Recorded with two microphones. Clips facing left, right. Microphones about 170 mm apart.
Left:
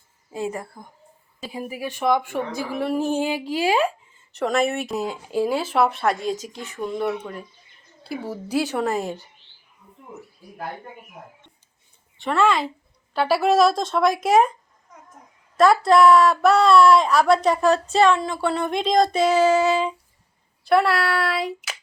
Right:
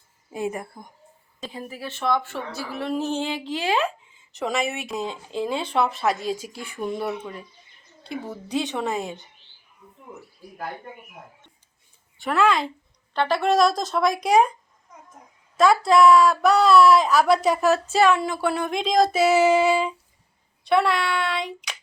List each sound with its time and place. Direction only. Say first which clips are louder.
0.3 s speech: even; 20° right (ahead or behind)
1.4 s a woman's voice: left 4 dB; 10° left (ahead or behind); by 7.4 s 5° right (ahead or behind)
8.0 s a woman's voice: left 3 dB; 5° left (ahead or behind)
12.2 s a woman's voice: left 1 dB; centre (ahead or behind)
15.5 s a woman's voice: left 2 dB; centre (ahead or behind)
20.7 s a woman's voice: left 2 dB; centre (ahead or behind)